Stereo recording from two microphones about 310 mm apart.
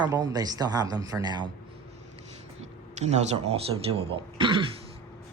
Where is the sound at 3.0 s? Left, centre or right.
Right.